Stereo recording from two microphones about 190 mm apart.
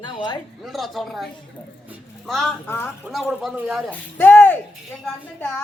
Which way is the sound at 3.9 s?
10° left (ahead or behind).